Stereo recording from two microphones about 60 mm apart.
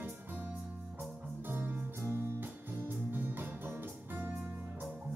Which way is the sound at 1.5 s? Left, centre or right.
Right.